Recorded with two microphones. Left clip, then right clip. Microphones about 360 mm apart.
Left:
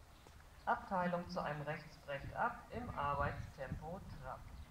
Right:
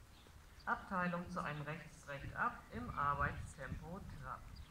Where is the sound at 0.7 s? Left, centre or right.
Left.